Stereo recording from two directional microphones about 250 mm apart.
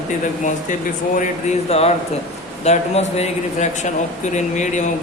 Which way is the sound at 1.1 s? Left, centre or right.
Left.